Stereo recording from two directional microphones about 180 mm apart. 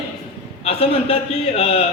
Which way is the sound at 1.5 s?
35° left (ahead or behind).